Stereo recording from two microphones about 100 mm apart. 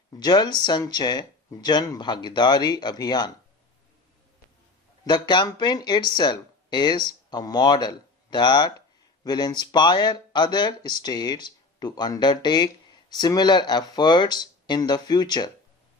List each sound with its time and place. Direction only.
0.1 s speech: 45° left (ahead or behind)
5.0 s speech: 45° left (ahead or behind)